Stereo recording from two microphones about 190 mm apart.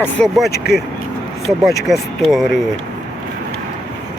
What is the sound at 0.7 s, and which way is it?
Speech, 55° left (ahead or behind).